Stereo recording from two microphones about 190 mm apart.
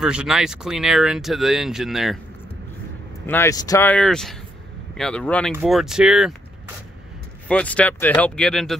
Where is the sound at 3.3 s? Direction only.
15° left (ahead or behind); by 6.3 s 5° right (ahead or behind).